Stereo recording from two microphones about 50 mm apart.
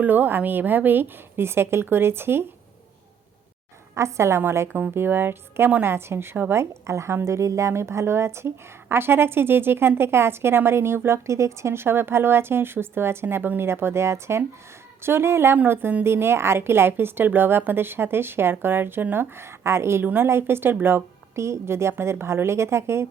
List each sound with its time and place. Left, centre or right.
0.0 s a woman's voice: right
3.9 s a woman's voice: right
4.7 s a woman's voice: right
6.5 s a woman's voice: right
11.3 s a woman's voice: right
15.5 s a woman's voice: right
16.0 s a woman's voice: right
21.3 s a woman's voice: right